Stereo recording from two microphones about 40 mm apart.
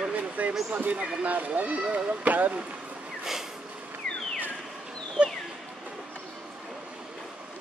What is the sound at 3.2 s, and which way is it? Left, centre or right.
Snort, centre.